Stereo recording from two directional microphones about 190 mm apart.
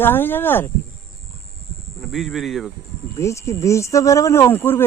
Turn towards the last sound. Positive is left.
turn(degrees=10)  # may be behind; listen again after turning